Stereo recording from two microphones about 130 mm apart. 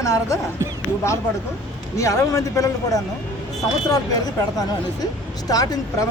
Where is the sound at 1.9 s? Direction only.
25° left (ahead or behind).